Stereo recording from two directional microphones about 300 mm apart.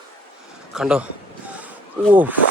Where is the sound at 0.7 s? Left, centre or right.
Centre.